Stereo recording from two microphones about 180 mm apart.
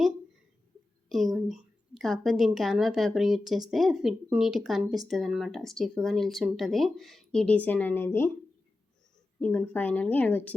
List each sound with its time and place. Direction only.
1.1 s a woman's voice: centre (ahead or behind)
9.4 s a woman's voice: 10° left (ahead or behind)